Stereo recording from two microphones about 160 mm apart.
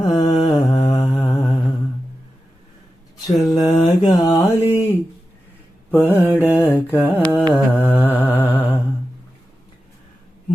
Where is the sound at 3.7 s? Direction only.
25° left (ahead or behind).